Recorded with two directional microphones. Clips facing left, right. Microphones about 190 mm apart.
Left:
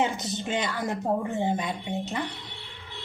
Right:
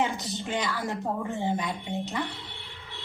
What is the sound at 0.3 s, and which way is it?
A woman's voice, 20° left (ahead or behind).